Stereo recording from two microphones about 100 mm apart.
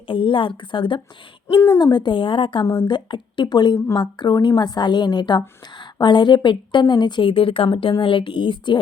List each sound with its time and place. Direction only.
0.1 s a woman's voice: 60° left (ahead or behind)